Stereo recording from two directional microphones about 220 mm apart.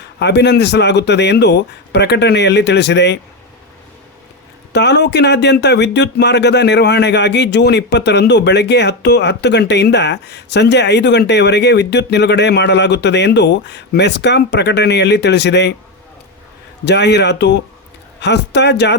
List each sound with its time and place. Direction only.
0.2 s speech: 50° left (ahead or behind)
4.7 s speech: 50° left (ahead or behind)
16.8 s speech: 50° left (ahead or behind)